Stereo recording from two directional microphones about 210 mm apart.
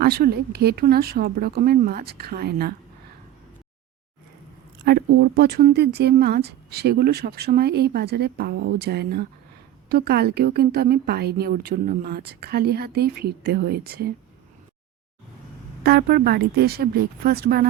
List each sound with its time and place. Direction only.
0.0 s speech: 50° right (ahead or behind)
4.9 s speech: 50° right (ahead or behind)
15.8 s speech: 50° right (ahead or behind)